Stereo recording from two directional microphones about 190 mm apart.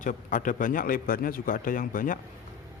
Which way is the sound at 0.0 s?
45° left (ahead or behind).